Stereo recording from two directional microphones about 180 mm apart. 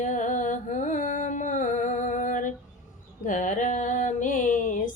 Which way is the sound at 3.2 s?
45° left (ahead or behind).